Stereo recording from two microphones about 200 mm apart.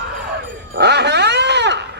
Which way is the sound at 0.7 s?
55° right (ahead or behind).